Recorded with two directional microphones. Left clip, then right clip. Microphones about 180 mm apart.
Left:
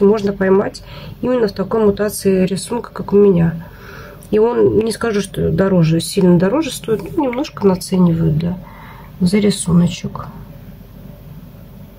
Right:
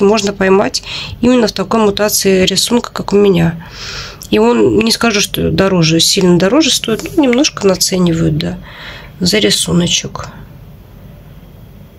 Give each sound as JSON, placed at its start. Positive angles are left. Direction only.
{"t": 0.0, "sound": "speech", "side_deg": -15}